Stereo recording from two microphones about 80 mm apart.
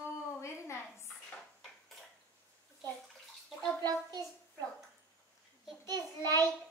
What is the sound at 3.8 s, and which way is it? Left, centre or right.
Bathtub, right.